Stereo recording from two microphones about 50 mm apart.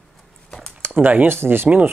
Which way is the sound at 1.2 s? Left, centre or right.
Right.